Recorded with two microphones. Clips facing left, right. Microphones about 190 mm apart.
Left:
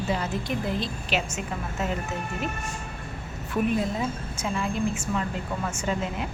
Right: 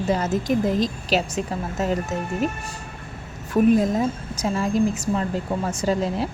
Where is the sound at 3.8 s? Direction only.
40° right (ahead or behind).